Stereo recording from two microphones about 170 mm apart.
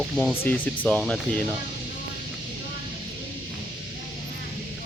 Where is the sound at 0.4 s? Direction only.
10° left (ahead or behind).